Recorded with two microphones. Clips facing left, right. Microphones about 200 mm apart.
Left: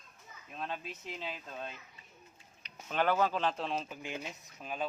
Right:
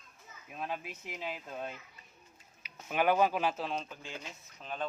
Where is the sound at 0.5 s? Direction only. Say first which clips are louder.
Right 1 dB; 10° right (ahead or behind).